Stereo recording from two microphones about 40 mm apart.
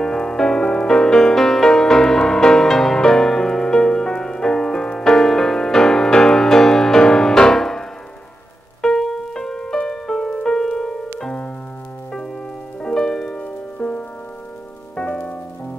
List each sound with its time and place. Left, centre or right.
0.0 s music: centre
8.8 s music: centre
12.8 s music: centre
13.4 s music: left
15.0 s music: left